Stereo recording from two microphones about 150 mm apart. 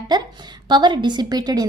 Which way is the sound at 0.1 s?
30° right (ahead or behind).